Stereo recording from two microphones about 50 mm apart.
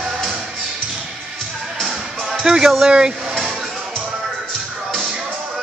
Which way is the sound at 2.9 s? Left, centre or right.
Centre.